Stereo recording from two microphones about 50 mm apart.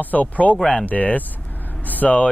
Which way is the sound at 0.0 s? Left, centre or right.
Left.